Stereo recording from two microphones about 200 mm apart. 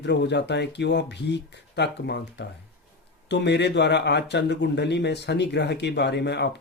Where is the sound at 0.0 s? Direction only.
60° left (ahead or behind).